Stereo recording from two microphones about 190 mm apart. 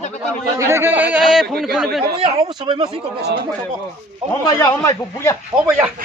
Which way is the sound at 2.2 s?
30° right (ahead or behind).